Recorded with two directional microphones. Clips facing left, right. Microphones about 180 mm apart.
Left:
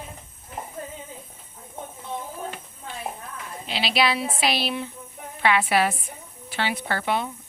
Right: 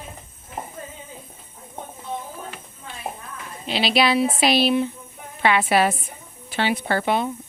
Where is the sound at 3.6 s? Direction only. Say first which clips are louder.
Right 4 dB; 20° right (ahead or behind).